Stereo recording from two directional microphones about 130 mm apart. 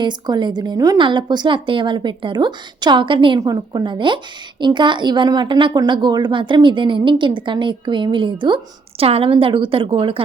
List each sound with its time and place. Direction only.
0.0 s a woman's voice: 35° right (ahead or behind)